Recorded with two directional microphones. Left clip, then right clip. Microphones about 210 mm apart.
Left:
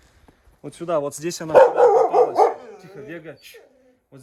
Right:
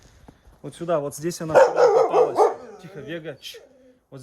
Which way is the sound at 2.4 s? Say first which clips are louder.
Left 1 dB; 25° left (ahead or behind).